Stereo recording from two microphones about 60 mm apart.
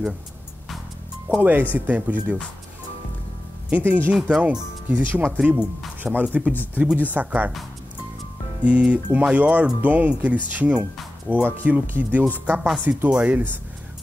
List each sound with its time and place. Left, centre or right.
1.4 s speech: right
3.7 s speech: right
5.4 s speech: right
6.0 s speech: centre
6.5 s speech: left
7.1 s speech: right
8.6 s speech: right